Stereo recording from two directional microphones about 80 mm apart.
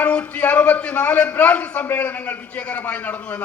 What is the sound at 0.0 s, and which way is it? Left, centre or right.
A man's voice, centre.